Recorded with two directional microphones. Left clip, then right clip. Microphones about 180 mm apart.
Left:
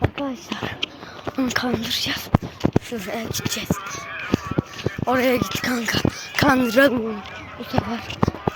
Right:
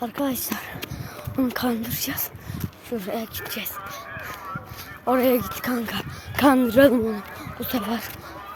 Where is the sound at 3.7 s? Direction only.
65° right (ahead or behind).